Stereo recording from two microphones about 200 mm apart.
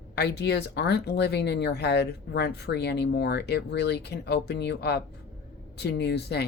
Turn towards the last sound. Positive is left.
turn(degrees=55)  # may be behind; listen again after turning